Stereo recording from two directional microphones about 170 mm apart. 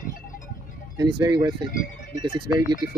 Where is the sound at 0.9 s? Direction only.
25° right (ahead or behind).